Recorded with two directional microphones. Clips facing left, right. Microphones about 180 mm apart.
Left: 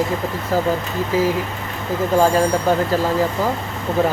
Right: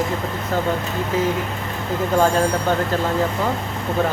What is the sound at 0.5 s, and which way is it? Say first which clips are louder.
Speech: left 3 dB; 5° left (ahead or behind).